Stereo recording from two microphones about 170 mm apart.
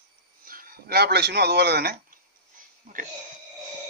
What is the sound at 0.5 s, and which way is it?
Speech, 55° right (ahead or behind).